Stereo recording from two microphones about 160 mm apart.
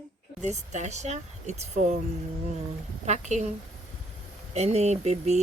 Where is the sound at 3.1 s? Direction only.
45° right (ahead or behind).